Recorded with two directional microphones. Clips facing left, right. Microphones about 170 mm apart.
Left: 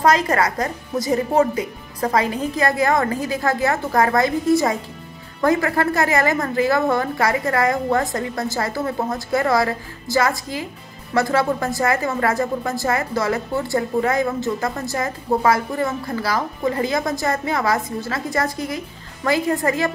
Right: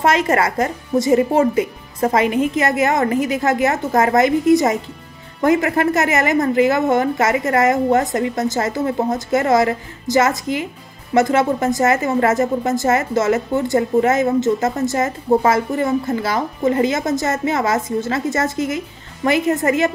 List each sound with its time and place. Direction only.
0.0 s a woman's voice: 25° right (ahead or behind)